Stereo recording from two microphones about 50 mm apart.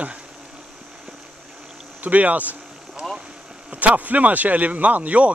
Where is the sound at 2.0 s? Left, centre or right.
Right.